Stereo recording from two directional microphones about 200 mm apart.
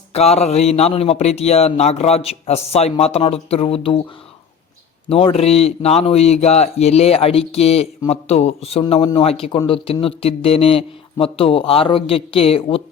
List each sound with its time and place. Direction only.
0.1 s a man's voice: 30° left (ahead or behind)
5.0 s a man's voice: 30° left (ahead or behind)